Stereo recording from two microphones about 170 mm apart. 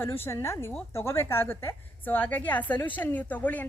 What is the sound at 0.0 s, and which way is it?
A woman's voice, 15° left (ahead or behind).